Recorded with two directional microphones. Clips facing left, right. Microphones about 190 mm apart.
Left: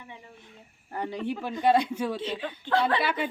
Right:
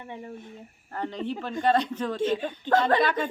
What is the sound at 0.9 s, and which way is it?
A man's voice, 10° left (ahead or behind).